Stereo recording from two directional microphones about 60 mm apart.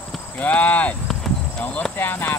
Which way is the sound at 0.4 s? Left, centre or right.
Left.